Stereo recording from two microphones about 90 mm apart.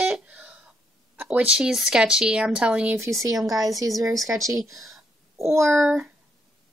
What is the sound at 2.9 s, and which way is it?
Speech, 35° right (ahead or behind).